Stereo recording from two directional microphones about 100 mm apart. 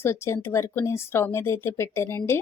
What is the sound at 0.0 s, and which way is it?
A woman's voice, 25° left (ahead or behind).